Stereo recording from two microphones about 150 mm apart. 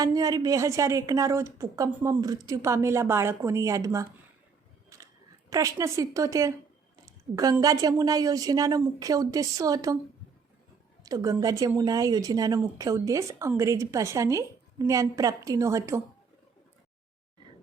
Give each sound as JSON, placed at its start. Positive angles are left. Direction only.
{"t": 0.0, "sound": "speech", "side_deg": -25}
{"t": 5.5, "sound": "speech", "side_deg": -25}
{"t": 6.9, "sound": "a sound", "side_deg": -25}
{"t": 7.6, "sound": "speech", "side_deg": -25}
{"t": 11.0, "sound": "speech", "side_deg": -25}